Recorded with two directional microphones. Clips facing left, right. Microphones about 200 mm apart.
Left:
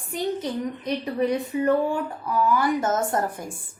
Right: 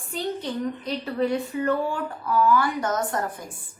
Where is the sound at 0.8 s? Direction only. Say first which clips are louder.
Left 3 dB; 15° left (ahead or behind).